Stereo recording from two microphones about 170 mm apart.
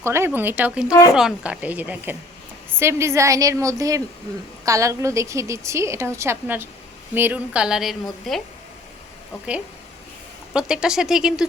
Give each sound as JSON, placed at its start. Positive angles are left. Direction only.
{"t": 0.0, "sound": "a woman's voice", "side_deg": -15}
{"t": 10.5, "sound": "speech", "side_deg": -5}